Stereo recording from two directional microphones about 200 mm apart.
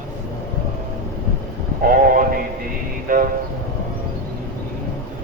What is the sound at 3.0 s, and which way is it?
Train, 45° right (ahead or behind).